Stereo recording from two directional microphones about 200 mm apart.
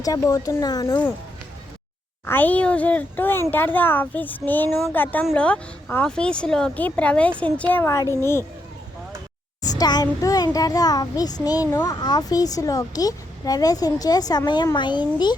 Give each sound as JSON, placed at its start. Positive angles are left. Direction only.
{"t": 0.0, "sound": "speech", "side_deg": 20}
{"t": 2.2, "sound": "speech", "side_deg": 10}
{"t": 9.6, "sound": "a child's voice", "side_deg": 20}